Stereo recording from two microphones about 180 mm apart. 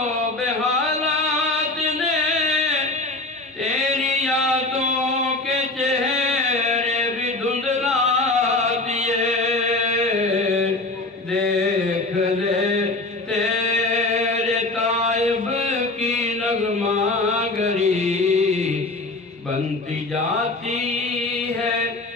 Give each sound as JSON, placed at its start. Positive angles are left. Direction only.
{"t": 1.5, "sound": "music", "side_deg": -40}
{"t": 3.6, "sound": "a sound", "side_deg": -40}
{"t": 13.3, "sound": "chant", "side_deg": -40}
{"t": 17.4, "sound": "mantra", "side_deg": -40}